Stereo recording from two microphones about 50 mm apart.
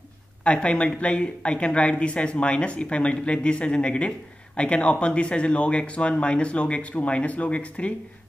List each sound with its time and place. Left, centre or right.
0.4 s speech: left